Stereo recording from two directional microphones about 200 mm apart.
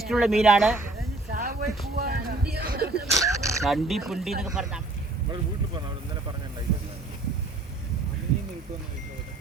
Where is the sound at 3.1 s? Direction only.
15° right (ahead or behind).